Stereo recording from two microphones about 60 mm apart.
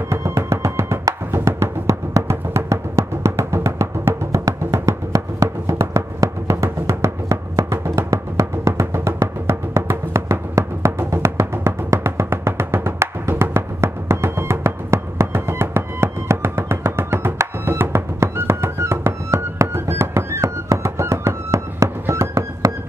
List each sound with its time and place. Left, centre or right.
0.1 s music: right
4.8 s music: right
21.8 s fireworks: right
22.7 s music: right